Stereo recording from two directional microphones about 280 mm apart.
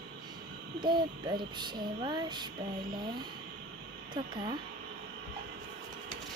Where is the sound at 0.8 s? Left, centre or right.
Centre.